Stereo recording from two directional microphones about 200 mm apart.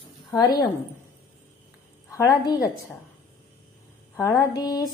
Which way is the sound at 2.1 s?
15° left (ahead or behind).